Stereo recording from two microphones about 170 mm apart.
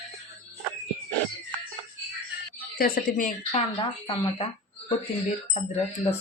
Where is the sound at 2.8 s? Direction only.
55° left (ahead or behind).